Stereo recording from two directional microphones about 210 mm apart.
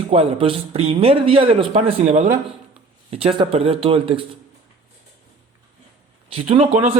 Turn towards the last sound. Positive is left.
turn(degrees=-30)  # may be behind; listen again after turning